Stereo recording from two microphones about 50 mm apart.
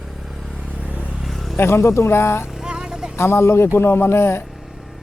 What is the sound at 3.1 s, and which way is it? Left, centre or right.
Speech, left.